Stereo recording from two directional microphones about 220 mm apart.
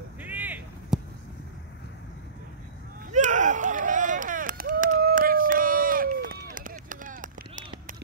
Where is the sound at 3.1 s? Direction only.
35° right (ahead or behind).